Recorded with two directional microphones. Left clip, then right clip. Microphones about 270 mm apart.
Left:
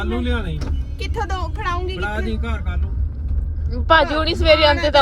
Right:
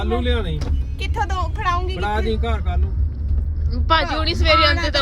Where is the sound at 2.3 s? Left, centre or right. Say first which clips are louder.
Right 4 dB; right.